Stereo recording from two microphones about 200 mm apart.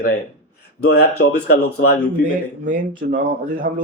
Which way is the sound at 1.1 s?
90° left.